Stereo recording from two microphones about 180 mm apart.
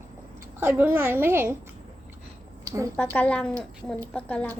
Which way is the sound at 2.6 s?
20° right (ahead or behind).